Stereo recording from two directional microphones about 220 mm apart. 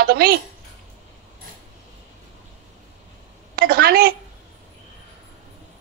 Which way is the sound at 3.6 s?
45° right (ahead or behind).